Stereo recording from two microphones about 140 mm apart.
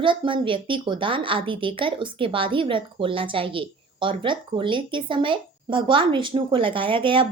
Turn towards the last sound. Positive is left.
turn(degrees=-35)  # may be behind; listen again after turning